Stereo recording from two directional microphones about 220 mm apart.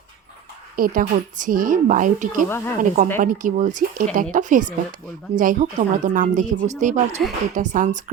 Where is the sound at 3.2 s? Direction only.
35° right (ahead or behind).